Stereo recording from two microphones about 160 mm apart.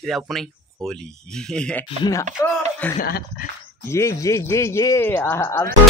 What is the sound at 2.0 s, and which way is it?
Speech, 20° left (ahead or behind).